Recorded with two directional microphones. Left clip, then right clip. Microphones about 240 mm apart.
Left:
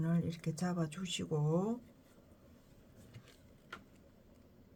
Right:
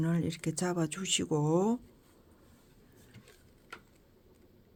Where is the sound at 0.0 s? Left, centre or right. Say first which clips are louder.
Right 6 dB; right.